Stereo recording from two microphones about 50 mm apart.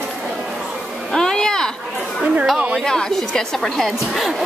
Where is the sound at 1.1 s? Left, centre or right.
Centre.